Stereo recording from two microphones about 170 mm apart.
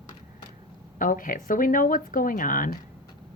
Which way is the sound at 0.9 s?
50° left (ahead or behind).